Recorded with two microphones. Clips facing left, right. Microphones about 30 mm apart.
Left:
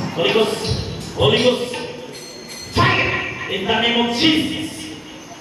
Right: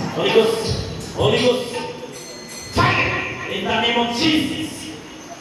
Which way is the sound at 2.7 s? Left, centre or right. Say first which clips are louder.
Left 1 dB; centre.